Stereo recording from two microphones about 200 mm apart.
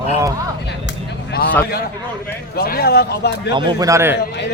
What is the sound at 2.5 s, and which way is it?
Speech, 50° left (ahead or behind).